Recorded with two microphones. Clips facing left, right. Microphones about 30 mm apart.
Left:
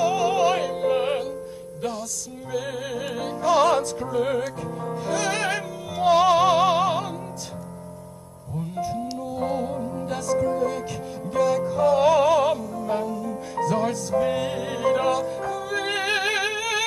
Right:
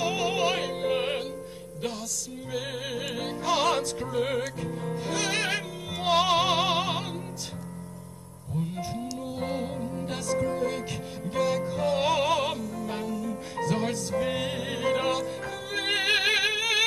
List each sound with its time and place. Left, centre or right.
0.0 s music: right
2.5 s music: right
8.7 s music: right
9.8 s music: centre
10.0 s music: right
13.1 s music: centre
13.6 s music: right